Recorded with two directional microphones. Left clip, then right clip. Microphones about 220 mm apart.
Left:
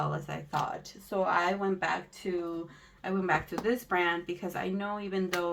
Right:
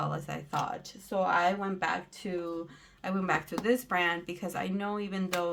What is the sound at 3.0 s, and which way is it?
Speech, 50° right (ahead or behind).